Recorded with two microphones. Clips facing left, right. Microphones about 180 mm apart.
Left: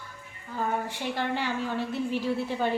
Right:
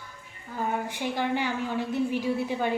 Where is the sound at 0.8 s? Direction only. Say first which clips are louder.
Right 2 dB; 15° right (ahead or behind).